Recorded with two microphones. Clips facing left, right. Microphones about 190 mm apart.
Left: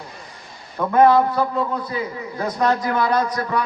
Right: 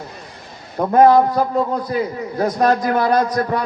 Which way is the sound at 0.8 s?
35° right (ahead or behind).